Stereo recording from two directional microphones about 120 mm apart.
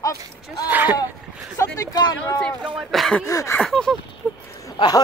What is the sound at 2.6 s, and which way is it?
Speech, 5° right (ahead or behind).